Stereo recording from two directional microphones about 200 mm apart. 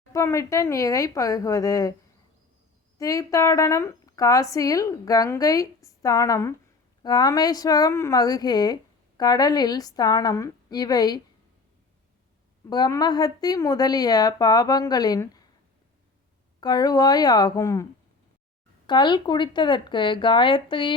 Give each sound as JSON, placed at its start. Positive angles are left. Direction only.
{"t": 0.1, "sound": "speech", "side_deg": 15}
{"t": 3.0, "sound": "a woman's voice", "side_deg": 15}
{"t": 12.6, "sound": "a woman's voice", "side_deg": 20}
{"t": 16.6, "sound": "a woman's voice", "side_deg": 20}
{"t": 18.9, "sound": "a woman's voice", "side_deg": 20}